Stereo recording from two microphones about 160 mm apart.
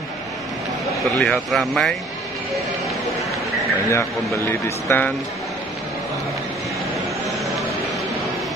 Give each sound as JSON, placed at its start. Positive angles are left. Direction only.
{"t": 1.0, "sound": "speech", "side_deg": 0}
{"t": 3.9, "sound": "speech", "side_deg": 20}
{"t": 7.2, "sound": "a sound", "side_deg": 0}